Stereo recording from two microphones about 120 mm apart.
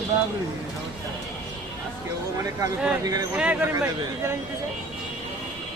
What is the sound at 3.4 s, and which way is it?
Speech, 10° right (ahead or behind).